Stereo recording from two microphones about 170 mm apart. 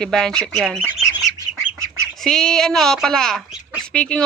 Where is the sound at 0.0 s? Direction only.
5° left (ahead or behind).